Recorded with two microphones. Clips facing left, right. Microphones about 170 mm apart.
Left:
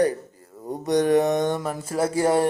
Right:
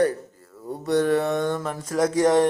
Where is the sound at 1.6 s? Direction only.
5° left (ahead or behind).